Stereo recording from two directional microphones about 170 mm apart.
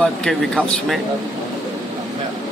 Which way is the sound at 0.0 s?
5° left (ahead or behind).